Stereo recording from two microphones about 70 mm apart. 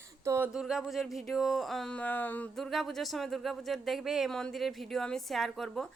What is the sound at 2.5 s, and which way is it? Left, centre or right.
A woman's voice, centre.